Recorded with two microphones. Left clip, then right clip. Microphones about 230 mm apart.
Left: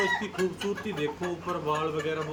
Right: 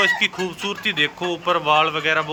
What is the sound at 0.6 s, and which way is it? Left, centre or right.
A man's voice, right.